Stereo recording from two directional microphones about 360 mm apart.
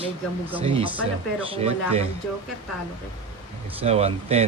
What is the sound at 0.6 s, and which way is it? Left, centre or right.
Speech, centre.